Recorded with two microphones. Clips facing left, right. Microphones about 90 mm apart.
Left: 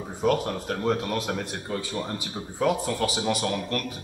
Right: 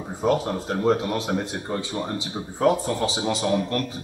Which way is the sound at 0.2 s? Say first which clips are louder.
Right 2 dB; 20° right (ahead or behind).